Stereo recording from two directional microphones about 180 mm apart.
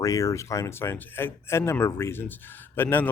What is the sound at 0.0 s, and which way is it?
Speech, 20° left (ahead or behind).